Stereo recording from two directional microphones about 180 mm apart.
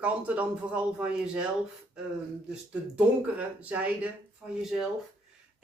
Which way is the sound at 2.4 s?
5° right (ahead or behind).